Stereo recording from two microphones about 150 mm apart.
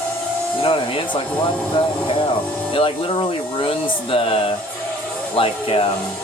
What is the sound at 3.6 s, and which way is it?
Speech, 35° left (ahead or behind).